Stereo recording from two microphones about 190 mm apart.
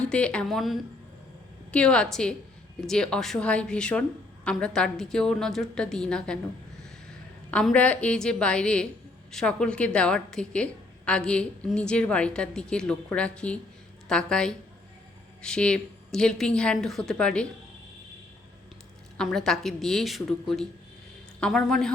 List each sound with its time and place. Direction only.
0.0 s a woman's voice: 5° left (ahead or behind)
19.1 s a woman's voice: 5° left (ahead or behind)